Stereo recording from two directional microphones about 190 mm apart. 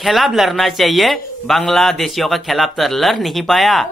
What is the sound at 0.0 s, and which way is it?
A man's voice, centre (ahead or behind).